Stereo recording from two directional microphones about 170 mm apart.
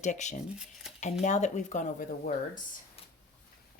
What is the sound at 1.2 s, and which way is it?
Speech, 45° left (ahead or behind).